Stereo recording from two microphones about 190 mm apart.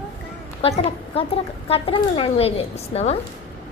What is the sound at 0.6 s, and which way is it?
A woman's voice, 30° left (ahead or behind).